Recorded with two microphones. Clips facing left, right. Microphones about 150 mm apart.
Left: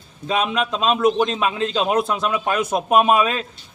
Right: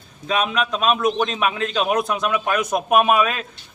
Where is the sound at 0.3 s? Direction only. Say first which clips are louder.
Even; 30° left (ahead or behind).